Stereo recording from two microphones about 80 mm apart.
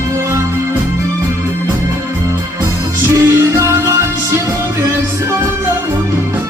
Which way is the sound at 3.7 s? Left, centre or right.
Right.